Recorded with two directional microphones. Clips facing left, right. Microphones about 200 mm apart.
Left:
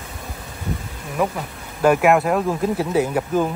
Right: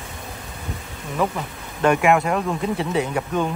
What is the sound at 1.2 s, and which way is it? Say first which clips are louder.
Speech: left 1 dB; 10° left (ahead or behind).